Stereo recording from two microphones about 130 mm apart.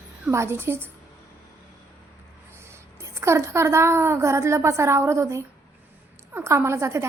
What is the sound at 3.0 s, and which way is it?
A woman's voice, 20° right (ahead or behind).